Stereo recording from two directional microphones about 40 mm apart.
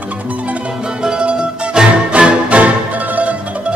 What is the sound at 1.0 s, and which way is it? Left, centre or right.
Music, right.